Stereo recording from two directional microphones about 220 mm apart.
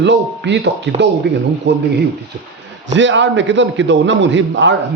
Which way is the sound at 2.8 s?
55° right (ahead or behind).